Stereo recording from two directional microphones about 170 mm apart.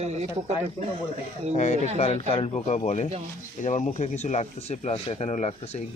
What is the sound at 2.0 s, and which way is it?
Speech, 35° left (ahead or behind).